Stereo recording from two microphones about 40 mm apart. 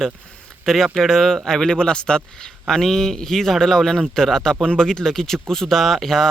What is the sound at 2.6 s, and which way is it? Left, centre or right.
Speech, centre.